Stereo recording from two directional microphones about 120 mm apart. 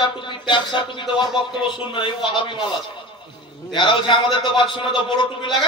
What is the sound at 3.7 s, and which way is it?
A man's voice, 40° left (ahead or behind).